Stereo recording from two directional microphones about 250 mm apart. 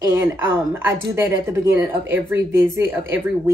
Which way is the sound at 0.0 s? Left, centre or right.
Centre.